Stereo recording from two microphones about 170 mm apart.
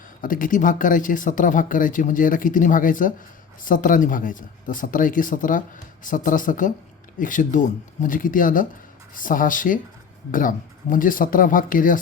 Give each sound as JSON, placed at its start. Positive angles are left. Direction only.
{"t": 0.2, "sound": "speech", "side_deg": 55}